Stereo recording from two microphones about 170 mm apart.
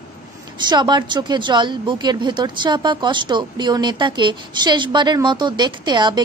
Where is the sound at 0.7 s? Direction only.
25° right (ahead or behind).